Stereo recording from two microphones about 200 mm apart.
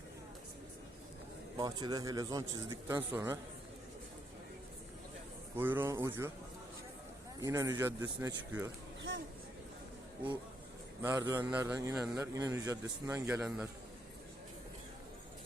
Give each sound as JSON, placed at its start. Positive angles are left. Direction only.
{"t": 1.5, "sound": "a man's voice", "side_deg": -20}
{"t": 5.5, "sound": "a man's voice", "side_deg": -10}
{"t": 7.3, "sound": "a man's voice", "side_deg": -15}
{"t": 9.0, "sound": "speech", "side_deg": -65}
{"t": 11.0, "sound": "a man's voice", "side_deg": -15}